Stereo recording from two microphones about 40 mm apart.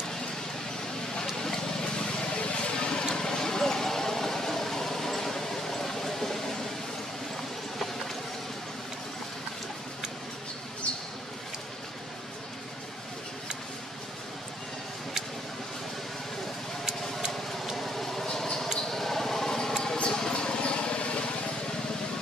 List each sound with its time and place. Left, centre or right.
1.2 s vehicle: centre
2.1 s vehicle: left
17.3 s vehicle: centre
18.2 s mouse: centre
18.9 s a sound: centre; by 21.2 s left